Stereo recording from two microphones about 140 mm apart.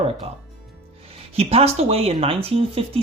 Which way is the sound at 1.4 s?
45° right (ahead or behind).